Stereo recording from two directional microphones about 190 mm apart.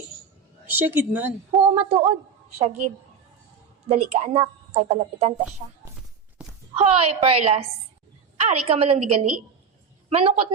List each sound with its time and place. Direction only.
0.7 s a woman's voice: 10° right (ahead or behind)
1.5 s a woman's voice: 30° right (ahead or behind)
3.8 s a woman's voice: 35° right (ahead or behind)
6.4 s a sound: 5° right (ahead or behind)
6.7 s a woman's voice: 30° right (ahead or behind)